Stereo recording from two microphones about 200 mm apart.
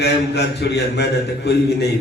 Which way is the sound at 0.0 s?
55° left (ahead or behind).